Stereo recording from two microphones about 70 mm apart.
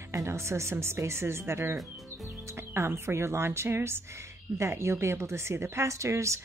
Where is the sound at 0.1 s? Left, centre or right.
Right.